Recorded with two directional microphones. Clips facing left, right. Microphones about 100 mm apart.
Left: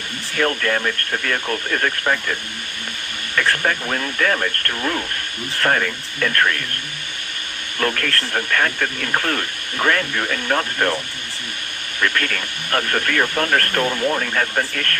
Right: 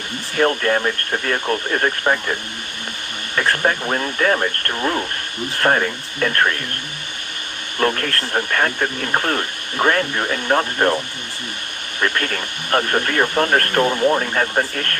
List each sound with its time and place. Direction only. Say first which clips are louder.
0.3 s speech: right 3 dB; 30° right (ahead or behind)
3.3 s speech: right 1 dB; 30° right (ahead or behind)
7.8 s speech: right 2 dB; 30° right (ahead or behind)